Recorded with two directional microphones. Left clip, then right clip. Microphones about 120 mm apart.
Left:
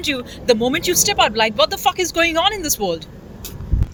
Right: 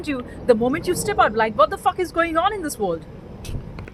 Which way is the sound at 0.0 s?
20° left (ahead or behind).